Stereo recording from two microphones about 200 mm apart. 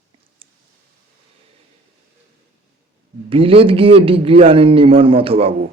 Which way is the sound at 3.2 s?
25° right (ahead or behind).